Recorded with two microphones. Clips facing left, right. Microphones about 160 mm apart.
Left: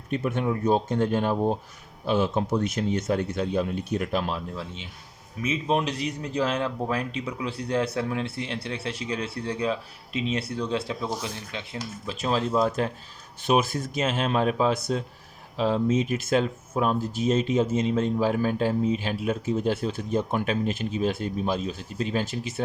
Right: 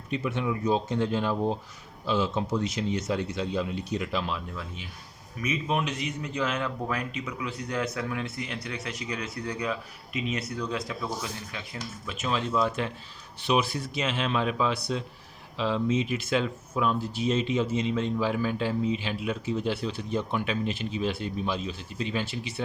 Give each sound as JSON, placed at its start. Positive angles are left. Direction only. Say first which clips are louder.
{"t": 0.1, "sound": "speech", "louder": "left 3 dB", "side_deg": 50}
{"t": 4.5, "sound": "a man's voice", "louder": "left 3 dB", "side_deg": 25}